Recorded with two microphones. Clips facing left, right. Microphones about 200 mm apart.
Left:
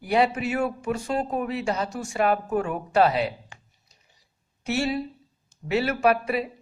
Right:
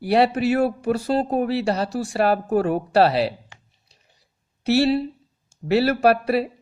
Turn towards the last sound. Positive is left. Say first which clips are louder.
# right 4 dB
turn(degrees=-35)  # may be behind; listen again after turning